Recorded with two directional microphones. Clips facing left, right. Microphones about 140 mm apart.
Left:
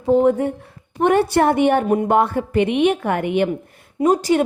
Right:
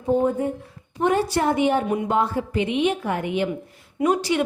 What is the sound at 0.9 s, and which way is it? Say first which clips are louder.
A woman's voice: left 5 dB; 65° left (ahead or behind).